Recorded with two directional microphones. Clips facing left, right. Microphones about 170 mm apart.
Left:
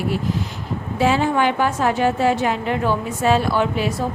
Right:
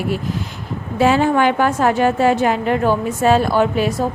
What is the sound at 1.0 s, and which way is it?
A woman's voice, 55° right (ahead or behind).